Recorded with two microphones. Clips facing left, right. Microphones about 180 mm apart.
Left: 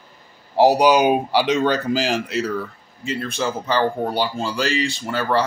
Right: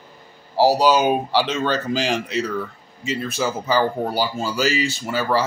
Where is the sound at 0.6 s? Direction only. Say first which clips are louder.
Left 2 dB; 15° left (ahead or behind).